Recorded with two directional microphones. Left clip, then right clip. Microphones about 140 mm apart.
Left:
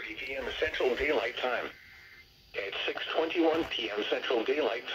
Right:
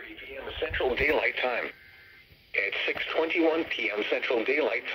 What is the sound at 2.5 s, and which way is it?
Radio, 30° right (ahead or behind).